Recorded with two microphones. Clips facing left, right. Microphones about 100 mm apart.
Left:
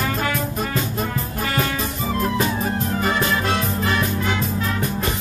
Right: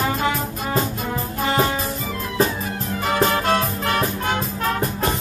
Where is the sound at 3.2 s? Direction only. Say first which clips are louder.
Right 3 dB; 45° right (ahead or behind).